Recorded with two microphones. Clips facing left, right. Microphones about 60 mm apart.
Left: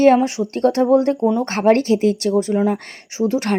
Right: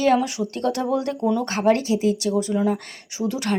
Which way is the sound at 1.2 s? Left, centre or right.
Centre.